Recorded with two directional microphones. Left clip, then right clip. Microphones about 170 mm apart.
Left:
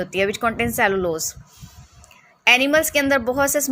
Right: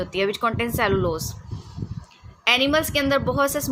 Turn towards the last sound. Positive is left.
turn(degrees=25)  # may be behind; listen again after turning